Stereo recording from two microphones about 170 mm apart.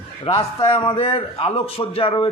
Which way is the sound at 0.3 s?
35° left (ahead or behind).